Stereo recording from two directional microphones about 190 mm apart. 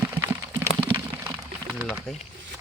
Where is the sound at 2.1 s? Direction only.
5° left (ahead or behind).